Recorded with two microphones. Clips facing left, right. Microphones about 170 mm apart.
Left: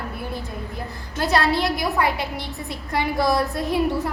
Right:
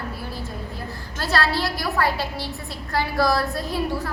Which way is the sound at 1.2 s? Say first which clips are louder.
Left 3 dB; 20° left (ahead or behind).